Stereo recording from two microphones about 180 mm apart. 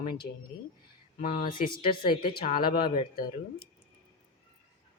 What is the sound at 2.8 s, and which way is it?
Speech, 30° left (ahead or behind).